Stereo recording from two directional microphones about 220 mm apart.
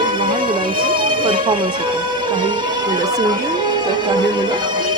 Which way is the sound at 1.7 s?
20° right (ahead or behind).